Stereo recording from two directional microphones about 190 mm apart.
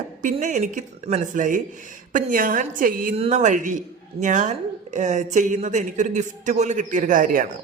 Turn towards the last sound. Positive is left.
turn(degrees=-45)  # may be behind; listen again after turning